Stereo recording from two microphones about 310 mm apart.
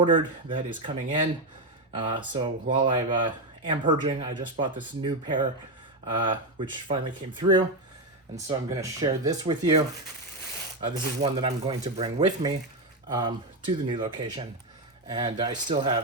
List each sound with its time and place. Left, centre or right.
0.0 s speech: centre
2.0 s speech: centre